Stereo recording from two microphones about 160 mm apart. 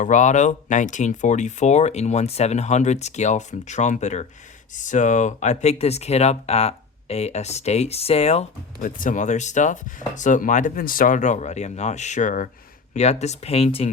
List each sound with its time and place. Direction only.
0.0 s speech: 50° left (ahead or behind)
9.0 s speech: 55° left (ahead or behind); by 13.9 s 40° left (ahead or behind)